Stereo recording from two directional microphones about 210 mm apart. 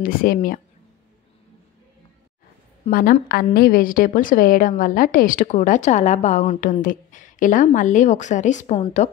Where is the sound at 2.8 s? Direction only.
45° left (ahead or behind).